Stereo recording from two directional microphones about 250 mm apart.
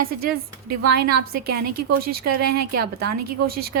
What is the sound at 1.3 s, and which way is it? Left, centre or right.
A woman's voice, right.